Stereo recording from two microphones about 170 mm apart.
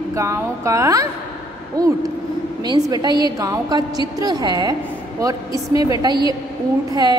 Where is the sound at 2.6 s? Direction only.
25° right (ahead or behind).